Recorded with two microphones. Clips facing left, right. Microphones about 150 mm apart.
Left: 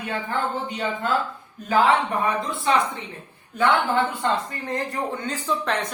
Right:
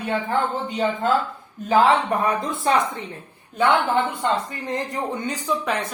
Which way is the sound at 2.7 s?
40° right (ahead or behind).